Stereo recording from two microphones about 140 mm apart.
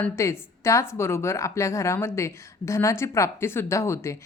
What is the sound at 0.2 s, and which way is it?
A woman's voice, 20° left (ahead or behind).